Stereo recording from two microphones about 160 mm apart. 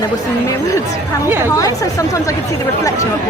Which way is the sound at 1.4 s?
20° left (ahead or behind).